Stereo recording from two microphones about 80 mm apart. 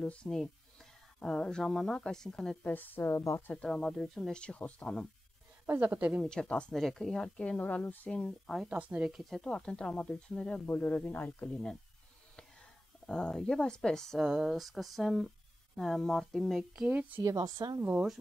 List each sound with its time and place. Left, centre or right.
0.0 s speech: centre
2.6 s speech: left
3.5 s speech: centre
5.7 s speech: right
6.2 s speech: centre
8.6 s speech: centre
9.1 s speech: centre
13.0 s speech: centre
14.2 s speech: centre
16.8 s speech: right
17.2 s a woman's voice: right